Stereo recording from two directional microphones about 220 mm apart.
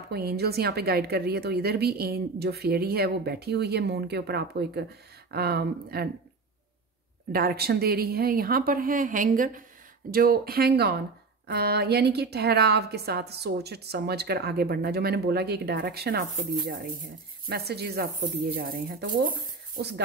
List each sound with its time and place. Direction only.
0.1 s a woman's voice: 45° right (ahead or behind)
7.3 s a woman's voice: 45° right (ahead or behind)